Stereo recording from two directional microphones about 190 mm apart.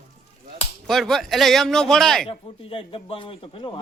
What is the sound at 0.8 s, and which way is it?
Speech, centre (ahead or behind).